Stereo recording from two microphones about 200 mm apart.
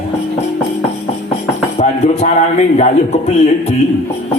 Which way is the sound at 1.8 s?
30° left (ahead or behind).